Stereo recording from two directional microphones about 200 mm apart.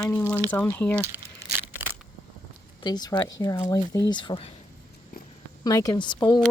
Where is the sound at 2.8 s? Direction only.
20° left (ahead or behind).